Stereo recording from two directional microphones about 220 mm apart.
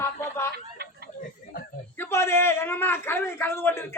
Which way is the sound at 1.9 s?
10° left (ahead or behind).